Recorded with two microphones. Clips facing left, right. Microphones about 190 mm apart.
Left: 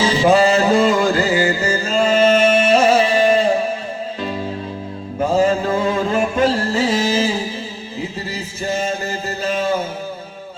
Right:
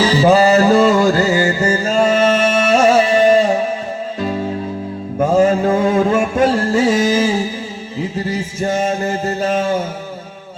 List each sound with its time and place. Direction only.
0.3 s music: 40° right (ahead or behind)
5.2 s music: 50° right (ahead or behind)
8.6 s music: 50° right (ahead or behind)